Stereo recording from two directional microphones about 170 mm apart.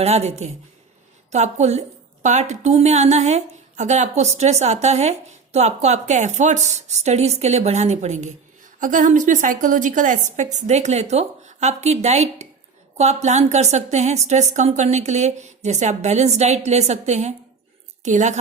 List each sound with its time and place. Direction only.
0.0 s a woman's voice: 40° right (ahead or behind)